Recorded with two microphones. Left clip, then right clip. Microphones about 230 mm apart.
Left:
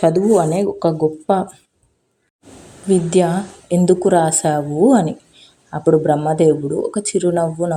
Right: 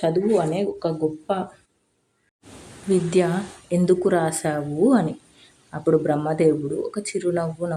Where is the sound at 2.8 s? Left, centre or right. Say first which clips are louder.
Left 5 dB; centre.